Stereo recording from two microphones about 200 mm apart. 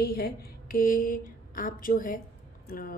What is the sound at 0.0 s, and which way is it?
A woman's voice, 50° left (ahead or behind).